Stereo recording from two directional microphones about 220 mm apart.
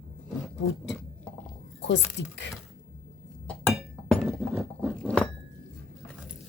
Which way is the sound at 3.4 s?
10° left (ahead or behind).